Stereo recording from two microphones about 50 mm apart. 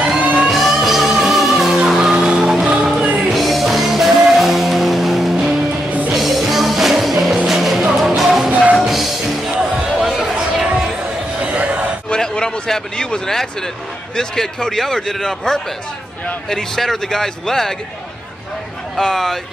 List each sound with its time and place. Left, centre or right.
0.2 s music: right
0.5 s music: centre
8.5 s music: right
8.8 s music: centre
9.8 s chatter: centre
11.4 s a sound: right
12.1 s a sound: centre
14.1 s a man's voice: centre
18.9 s speech: centre